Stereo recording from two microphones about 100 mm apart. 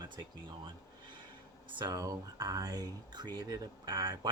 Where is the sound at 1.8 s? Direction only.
35° right (ahead or behind).